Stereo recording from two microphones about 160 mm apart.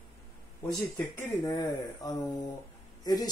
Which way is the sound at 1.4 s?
25° left (ahead or behind).